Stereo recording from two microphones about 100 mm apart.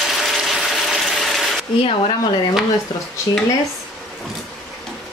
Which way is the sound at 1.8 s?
70° left (ahead or behind).